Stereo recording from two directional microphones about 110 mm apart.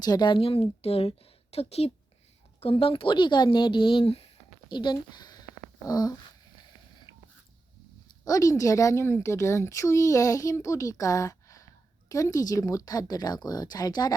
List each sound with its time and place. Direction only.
0.0 s a woman's voice: 40° left (ahead or behind); by 1.9 s 70° left (ahead or behind)
2.6 s a woman's voice: 60° left (ahead or behind)
4.7 s speech: 45° left (ahead or behind)
8.2 s a woman's voice: 30° left (ahead or behind)